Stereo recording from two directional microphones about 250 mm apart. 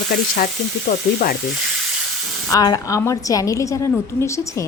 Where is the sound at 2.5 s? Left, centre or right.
Centre.